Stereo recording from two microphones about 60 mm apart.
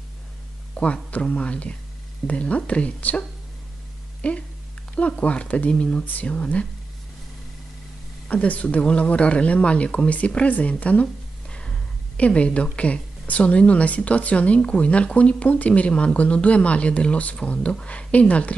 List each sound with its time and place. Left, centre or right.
0.8 s speech: centre
8.3 s speech: left